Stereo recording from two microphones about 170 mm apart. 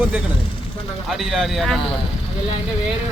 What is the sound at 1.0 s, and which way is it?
Speech, centre (ahead or behind).